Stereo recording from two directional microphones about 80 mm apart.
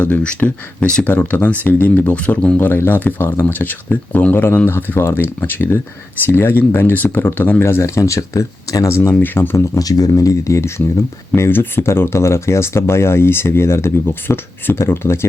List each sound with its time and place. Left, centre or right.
0.0 s speech: centre
2.6 s speech: left
9.2 s speech: left
9.7 s speech: left